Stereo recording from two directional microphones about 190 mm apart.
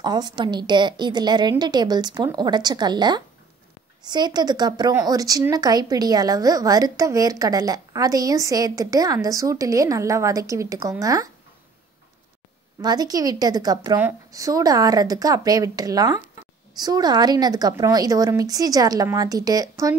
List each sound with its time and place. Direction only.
0.0 s a woman's voice: 20° right (ahead or behind)
12.8 s a woman's voice: 20° right (ahead or behind)